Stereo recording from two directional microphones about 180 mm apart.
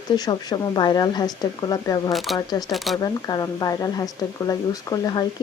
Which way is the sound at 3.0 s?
20° left (ahead or behind).